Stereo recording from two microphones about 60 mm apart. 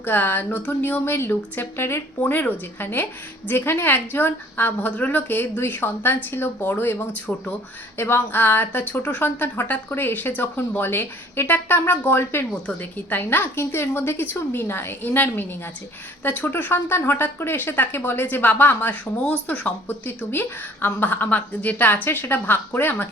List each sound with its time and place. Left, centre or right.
0.0 s speech: left
1.1 s a woman's voice: left
2.2 s speech: left
7.9 s speech: left